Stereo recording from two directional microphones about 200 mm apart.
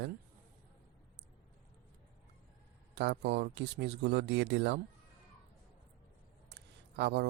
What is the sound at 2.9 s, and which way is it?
Speech, 60° right (ahead or behind).